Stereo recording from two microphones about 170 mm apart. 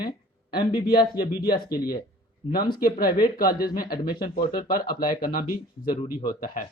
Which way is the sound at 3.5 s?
60° left (ahead or behind).